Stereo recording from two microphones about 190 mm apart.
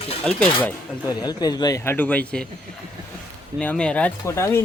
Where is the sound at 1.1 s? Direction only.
20° left (ahead or behind).